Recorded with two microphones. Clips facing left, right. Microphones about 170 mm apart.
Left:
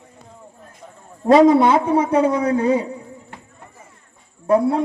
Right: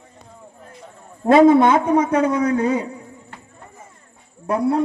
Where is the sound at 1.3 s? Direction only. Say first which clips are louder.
Even; 35° left (ahead or behind).